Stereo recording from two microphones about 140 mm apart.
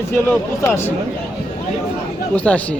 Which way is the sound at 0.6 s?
15° left (ahead or behind).